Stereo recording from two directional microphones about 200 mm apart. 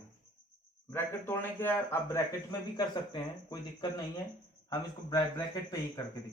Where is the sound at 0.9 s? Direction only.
10° left (ahead or behind).